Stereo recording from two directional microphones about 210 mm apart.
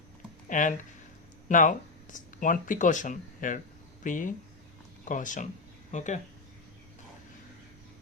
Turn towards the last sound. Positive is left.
turn(degrees=35)  # may be behind; listen again after turning